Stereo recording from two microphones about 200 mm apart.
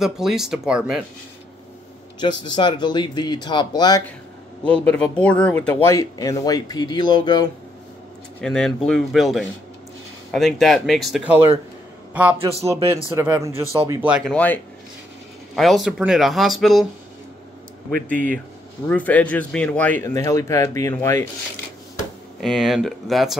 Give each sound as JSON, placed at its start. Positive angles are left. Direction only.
{"t": 0.0, "sound": "speech", "side_deg": 0}
{"t": 2.1, "sound": "speech", "side_deg": 20}
{"t": 4.8, "sound": "speech", "side_deg": 5}
{"t": 8.4, "sound": "a man's voice", "side_deg": 5}
{"t": 14.3, "sound": "speech", "side_deg": 10}
{"t": 18.0, "sound": "speech", "side_deg": 5}
{"t": 22.4, "sound": "speech", "side_deg": 0}